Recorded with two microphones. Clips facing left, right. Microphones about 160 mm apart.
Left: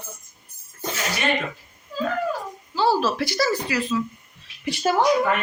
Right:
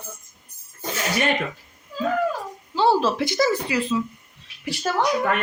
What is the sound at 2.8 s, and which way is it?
A woman's voice, 20° right (ahead or behind).